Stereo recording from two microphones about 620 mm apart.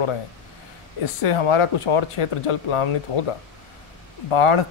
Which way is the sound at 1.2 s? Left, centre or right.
Left.